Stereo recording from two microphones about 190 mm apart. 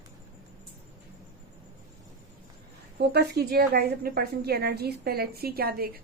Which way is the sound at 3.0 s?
60° right (ahead or behind).